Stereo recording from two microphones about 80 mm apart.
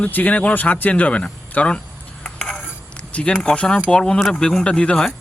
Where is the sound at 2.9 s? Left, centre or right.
Centre.